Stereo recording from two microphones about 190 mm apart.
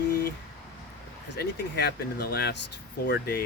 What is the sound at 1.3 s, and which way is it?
Speech, 60° left (ahead or behind).